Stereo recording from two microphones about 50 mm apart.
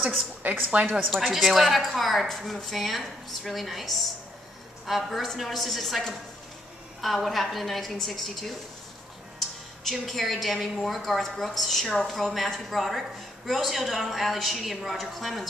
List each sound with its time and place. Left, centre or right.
0.4 s a woman's voice: right
1.1 s a woman's voice: centre
9.8 s a woman's voice: centre